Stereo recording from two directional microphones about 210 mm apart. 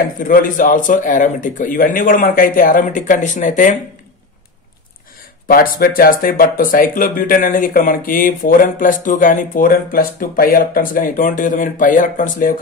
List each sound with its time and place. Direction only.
0.3 s speech: 40° left (ahead or behind)
5.5 s speech: 45° left (ahead or behind)